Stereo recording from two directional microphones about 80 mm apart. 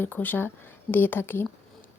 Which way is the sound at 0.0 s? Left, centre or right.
Left.